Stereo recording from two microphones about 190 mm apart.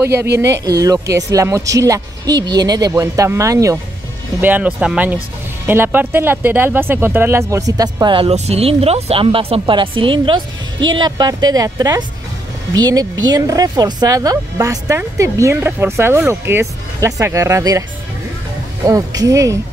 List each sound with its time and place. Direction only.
0.0 s speech: 15° right (ahead or behind)
18.9 s speech: 15° right (ahead or behind)